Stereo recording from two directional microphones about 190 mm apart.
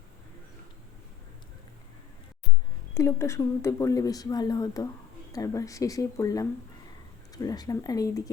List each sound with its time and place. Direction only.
2.9 s a woman's voice: 15° left (ahead or behind)